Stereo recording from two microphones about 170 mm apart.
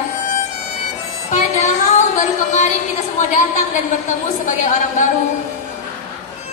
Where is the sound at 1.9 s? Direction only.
45° left (ahead or behind).